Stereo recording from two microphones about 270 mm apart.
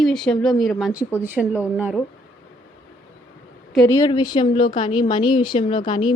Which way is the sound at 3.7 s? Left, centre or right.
Centre.